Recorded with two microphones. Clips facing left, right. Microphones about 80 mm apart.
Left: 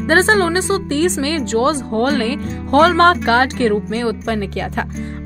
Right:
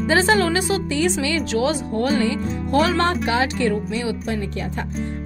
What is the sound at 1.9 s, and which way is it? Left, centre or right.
Speech, left.